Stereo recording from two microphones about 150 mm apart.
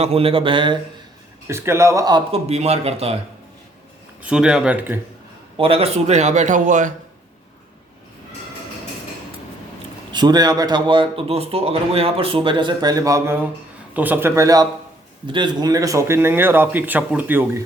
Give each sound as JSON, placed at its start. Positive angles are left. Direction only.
{"t": 0.0, "sound": "speech", "side_deg": -40}
{"t": 1.5, "sound": "speech", "side_deg": -20}
{"t": 2.5, "sound": "speech", "side_deg": -45}
{"t": 4.2, "sound": "speech", "side_deg": -5}
{"t": 5.5, "sound": "speech", "side_deg": -40}
{"t": 10.1, "sound": "speech", "side_deg": -30}